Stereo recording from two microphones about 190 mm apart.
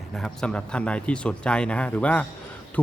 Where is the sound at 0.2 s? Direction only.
5° left (ahead or behind).